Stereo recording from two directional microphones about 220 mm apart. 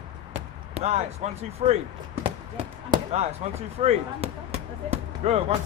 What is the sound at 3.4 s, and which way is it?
Speech, 30° right (ahead or behind).